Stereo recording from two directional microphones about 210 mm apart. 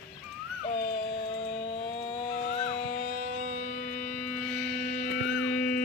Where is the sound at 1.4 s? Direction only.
25° left (ahead or behind).